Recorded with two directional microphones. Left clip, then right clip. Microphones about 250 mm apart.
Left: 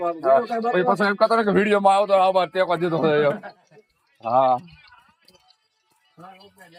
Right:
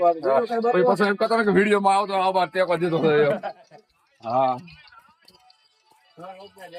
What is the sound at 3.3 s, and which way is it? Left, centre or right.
Speech, right.